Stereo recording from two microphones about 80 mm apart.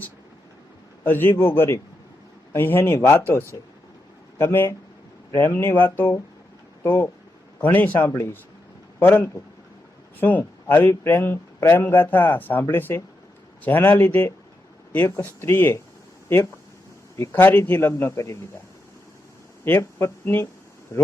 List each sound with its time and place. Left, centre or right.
1.0 s speech: left
7.9 s a man's voice: left
10.7 s speech: left
17.2 s speech: left
19.6 s speech: left